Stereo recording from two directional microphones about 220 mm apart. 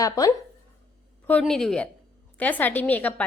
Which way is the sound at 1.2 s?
5° left (ahead or behind).